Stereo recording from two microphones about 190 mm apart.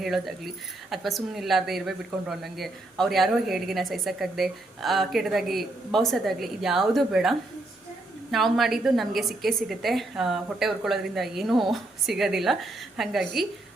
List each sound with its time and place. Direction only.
0.0 s a woman's voice: centre (ahead or behind)